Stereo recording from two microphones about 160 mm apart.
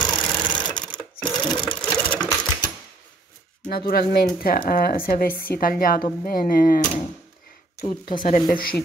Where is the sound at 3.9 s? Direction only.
70° left (ahead or behind).